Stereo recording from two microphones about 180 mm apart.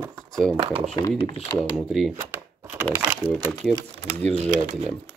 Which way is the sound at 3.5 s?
Centre (ahead or behind).